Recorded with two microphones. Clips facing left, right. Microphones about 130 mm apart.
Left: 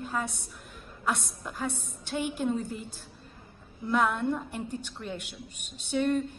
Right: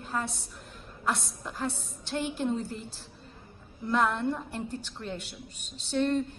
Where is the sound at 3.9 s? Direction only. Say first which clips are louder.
Even; 5° left (ahead or behind).